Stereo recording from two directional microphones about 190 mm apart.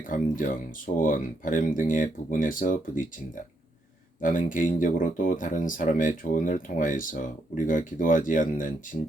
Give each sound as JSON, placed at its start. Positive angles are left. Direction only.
{"t": 0.0, "sound": "speech", "side_deg": 45}
{"t": 4.2, "sound": "speech", "side_deg": 45}